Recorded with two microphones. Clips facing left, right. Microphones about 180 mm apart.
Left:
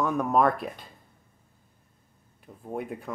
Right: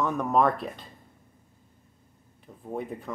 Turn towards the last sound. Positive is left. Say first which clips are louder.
# even
turn(degrees=5)  # may be behind; listen again after turning